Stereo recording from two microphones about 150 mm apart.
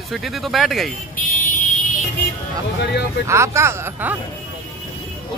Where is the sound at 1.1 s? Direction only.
60° left (ahead or behind).